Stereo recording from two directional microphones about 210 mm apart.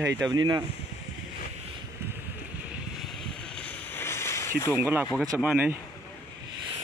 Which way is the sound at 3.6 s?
10° left (ahead or behind).